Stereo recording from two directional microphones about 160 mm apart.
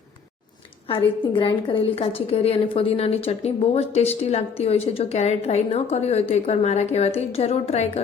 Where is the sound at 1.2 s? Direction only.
30° left (ahead or behind).